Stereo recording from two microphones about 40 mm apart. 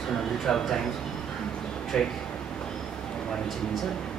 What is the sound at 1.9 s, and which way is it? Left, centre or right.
Speech, centre.